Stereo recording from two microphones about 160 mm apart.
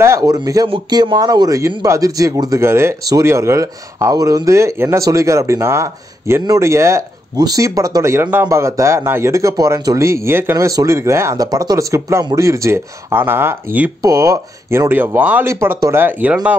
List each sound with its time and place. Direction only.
0.0 s speech: 20° right (ahead or behind)